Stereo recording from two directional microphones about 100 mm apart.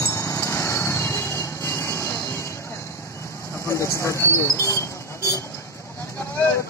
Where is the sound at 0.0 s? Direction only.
30° left (ahead or behind).